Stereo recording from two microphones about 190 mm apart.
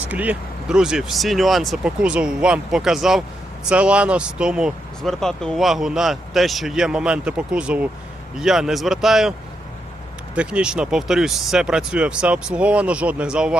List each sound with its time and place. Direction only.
0.1 s speech: 10° right (ahead or behind)
10.3 s speech: 5° right (ahead or behind)